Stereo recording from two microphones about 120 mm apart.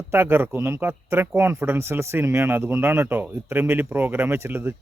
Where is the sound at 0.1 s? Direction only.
20° right (ahead or behind).